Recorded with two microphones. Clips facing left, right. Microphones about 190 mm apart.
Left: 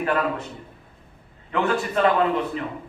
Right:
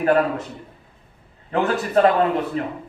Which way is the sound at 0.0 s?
40° right (ahead or behind).